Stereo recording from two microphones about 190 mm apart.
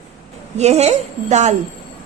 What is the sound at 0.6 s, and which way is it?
Speech, 35° right (ahead or behind).